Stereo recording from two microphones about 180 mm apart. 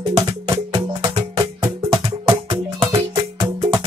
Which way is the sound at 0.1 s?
25° right (ahead or behind).